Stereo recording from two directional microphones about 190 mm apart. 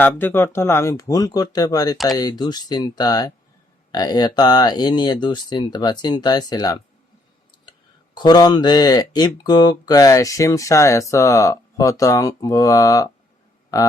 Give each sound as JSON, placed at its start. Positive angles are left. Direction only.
{"t": 0.0, "sound": "speech", "side_deg": 10}
{"t": 8.1, "sound": "speech", "side_deg": 20}